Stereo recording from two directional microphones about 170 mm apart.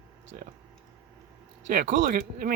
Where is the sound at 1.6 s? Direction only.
55° right (ahead or behind).